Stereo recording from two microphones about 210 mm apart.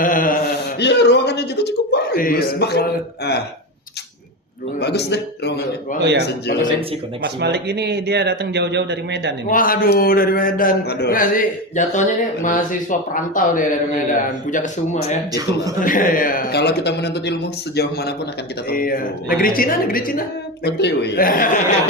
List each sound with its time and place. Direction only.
0.0 s a sound: 40° left (ahead or behind)
4.8 s a man's voice: 50° left (ahead or behind)
7.4 s speech: 50° right (ahead or behind)
9.5 s a man's voice: 40° left (ahead or behind)
15.3 s a man's voice: 15° right (ahead or behind)
15.8 s a man's voice: 40° left (ahead or behind)
18.7 s a man's voice: 45° left (ahead or behind)
20.7 s a man's voice: 55° left (ahead or behind)